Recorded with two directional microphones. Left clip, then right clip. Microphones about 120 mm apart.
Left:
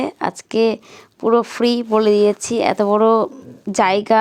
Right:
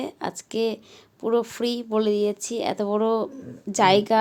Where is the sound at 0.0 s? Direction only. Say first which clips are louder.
Left 9 dB; 25° left (ahead or behind).